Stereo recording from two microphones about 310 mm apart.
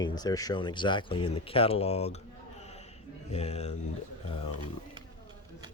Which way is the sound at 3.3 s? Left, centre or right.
Left.